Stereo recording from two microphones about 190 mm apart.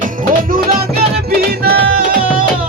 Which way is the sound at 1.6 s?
55° right (ahead or behind).